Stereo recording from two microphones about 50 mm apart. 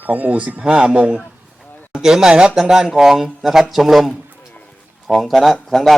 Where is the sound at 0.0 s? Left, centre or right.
Right.